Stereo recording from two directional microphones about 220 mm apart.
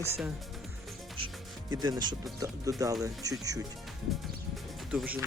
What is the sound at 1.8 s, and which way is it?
Speech, 20° right (ahead or behind).